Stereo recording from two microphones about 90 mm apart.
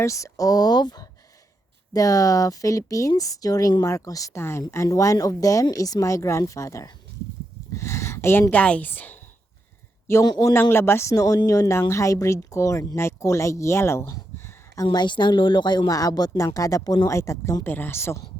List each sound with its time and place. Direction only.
0.0 s speech: 35° left (ahead or behind); by 1.0 s 50° left (ahead or behind)
1.9 s speech: 40° left (ahead or behind)
4.4 s a woman's voice: 30° left (ahead or behind)
10.2 s a woman's voice: 35° left (ahead or behind)
11.1 s speech: 40° left (ahead or behind)
14.8 s speech: 60° left (ahead or behind)
17.2 s a woman's voice: 35° left (ahead or behind)